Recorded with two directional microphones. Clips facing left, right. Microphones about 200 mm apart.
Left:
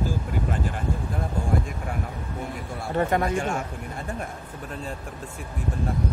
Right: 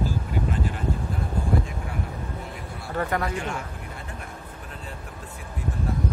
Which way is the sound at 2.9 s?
25° left (ahead or behind).